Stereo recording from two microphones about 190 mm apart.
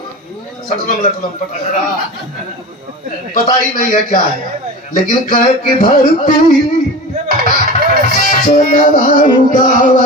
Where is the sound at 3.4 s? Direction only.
45° left (ahead or behind).